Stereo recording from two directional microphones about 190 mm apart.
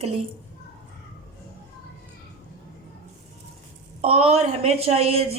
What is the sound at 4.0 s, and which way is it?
Speech, 30° right (ahead or behind).